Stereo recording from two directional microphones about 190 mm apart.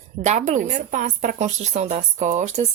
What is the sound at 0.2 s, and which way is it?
A woman's voice, 40° right (ahead or behind).